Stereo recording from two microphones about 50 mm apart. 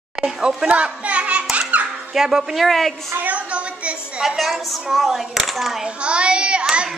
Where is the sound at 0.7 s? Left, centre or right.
Right.